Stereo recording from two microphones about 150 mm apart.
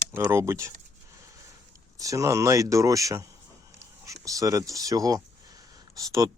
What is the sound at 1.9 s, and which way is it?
Speech, 20° right (ahead or behind).